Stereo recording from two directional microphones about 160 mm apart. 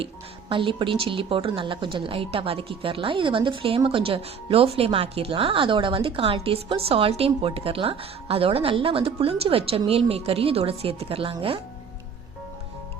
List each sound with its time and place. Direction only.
0.0 s speech: 30° right (ahead or behind)